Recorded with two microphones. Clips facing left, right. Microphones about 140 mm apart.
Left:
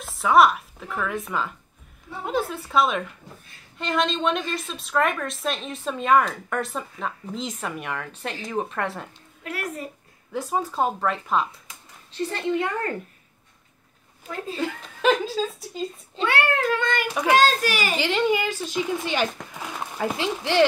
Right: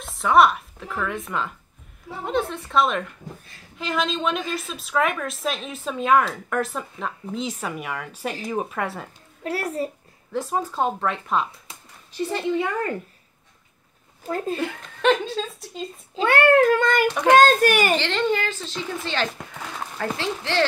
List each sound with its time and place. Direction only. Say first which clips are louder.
0.0 s a woman's voice: even; centre (ahead or behind)
9.4 s a child's voice: right 6 dB; 35° right (ahead or behind)
10.3 s a woman's voice: right 1 dB; centre (ahead or behind)
12.1 s speech: right 1 dB; 10° right (ahead or behind)
14.2 s a child's voice: right 6 dB; 40° right (ahead or behind)
14.6 s a woman's voice: right 1 dB; 5° left (ahead or behind)
16.3 s speech: right 7 dB; 50° right (ahead or behind)
17.1 s a woman's voice: right 2 dB; 5° left (ahead or behind)
17.4 s a child's voice: right 5 dB; 55° right (ahead or behind)
17.9 s a woman's voice: even; 10° left (ahead or behind)